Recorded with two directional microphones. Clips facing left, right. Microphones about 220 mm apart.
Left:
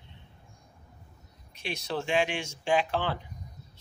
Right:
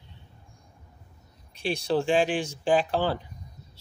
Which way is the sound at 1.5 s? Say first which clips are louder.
Right 8 dB; 30° right (ahead or behind).